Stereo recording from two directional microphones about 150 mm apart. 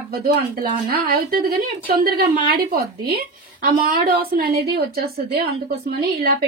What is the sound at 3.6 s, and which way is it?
Speech, 75° right (ahead or behind).